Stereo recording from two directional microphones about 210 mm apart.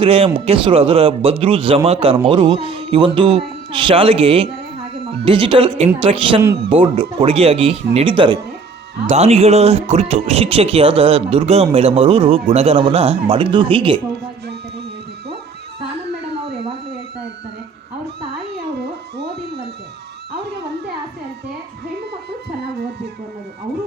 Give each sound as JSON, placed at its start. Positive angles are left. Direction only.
{"t": 0.0, "sound": "speech", "side_deg": -25}
{"t": 16.4, "sound": "cat", "side_deg": -30}
{"t": 19.1, "sound": "cat", "side_deg": -50}